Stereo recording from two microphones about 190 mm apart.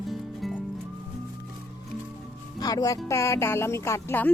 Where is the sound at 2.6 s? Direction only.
20° left (ahead or behind).